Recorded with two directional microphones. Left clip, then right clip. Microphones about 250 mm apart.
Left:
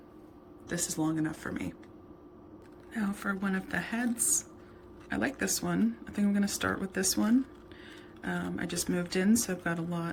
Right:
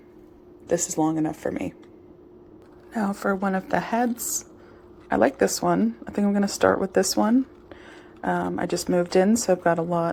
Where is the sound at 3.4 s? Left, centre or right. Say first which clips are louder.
Right 9 dB; centre.